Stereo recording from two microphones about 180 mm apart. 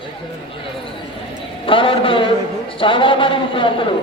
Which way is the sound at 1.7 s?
30° left (ahead or behind).